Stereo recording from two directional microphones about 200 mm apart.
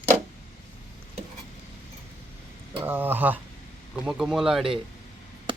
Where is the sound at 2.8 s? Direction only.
10° right (ahead or behind).